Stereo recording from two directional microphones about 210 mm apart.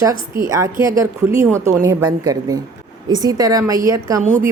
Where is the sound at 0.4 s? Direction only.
15° right (ahead or behind).